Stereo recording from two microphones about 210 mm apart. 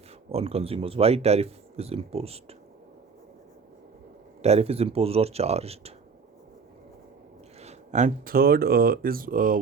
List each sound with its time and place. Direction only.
0.3 s speech: 30° right (ahead or behind)
4.4 s speech: 30° right (ahead or behind)
7.6 s speech: 35° right (ahead or behind)